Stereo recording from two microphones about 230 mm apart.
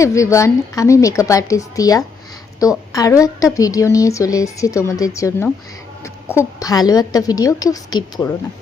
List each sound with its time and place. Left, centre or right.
0.0 s a woman's voice: centre